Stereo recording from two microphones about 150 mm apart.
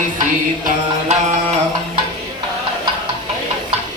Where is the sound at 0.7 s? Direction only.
50° right (ahead or behind).